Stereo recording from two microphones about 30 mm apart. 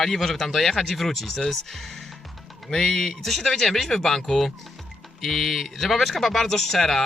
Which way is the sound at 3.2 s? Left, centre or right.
Centre.